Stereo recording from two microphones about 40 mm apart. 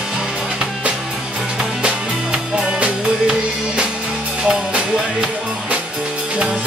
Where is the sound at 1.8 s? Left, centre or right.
Centre.